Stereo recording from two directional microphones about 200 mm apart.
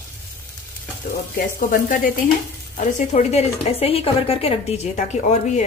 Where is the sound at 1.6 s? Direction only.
45° left (ahead or behind).